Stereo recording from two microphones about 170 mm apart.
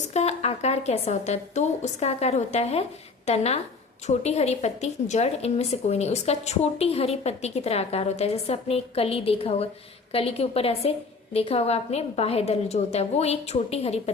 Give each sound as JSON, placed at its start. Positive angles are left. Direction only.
{"t": 0.1, "sound": "a woman's voice", "side_deg": 40}